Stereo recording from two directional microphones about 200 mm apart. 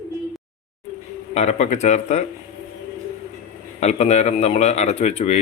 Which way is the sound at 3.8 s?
35° left (ahead or behind).